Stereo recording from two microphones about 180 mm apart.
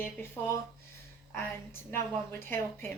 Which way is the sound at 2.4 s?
15° left (ahead or behind).